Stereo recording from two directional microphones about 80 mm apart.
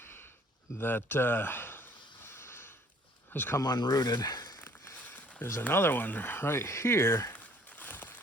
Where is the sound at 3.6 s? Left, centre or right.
Left.